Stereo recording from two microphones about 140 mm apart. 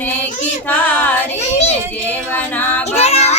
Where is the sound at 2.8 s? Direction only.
50° left (ahead or behind).